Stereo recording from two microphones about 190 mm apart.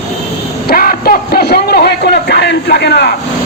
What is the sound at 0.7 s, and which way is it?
A man's voice, 55° left (ahead or behind).